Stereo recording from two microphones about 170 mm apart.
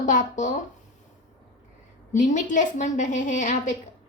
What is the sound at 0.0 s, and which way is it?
Speech, 50° left (ahead or behind).